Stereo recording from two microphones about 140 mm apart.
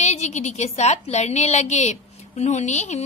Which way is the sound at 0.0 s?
55° left (ahead or behind).